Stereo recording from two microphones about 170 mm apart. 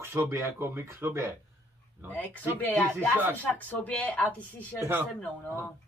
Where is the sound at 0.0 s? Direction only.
15° right (ahead or behind).